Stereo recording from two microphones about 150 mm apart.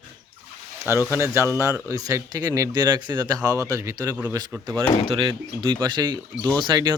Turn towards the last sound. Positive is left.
turn(degrees=-30)  # may be behind; listen again after turning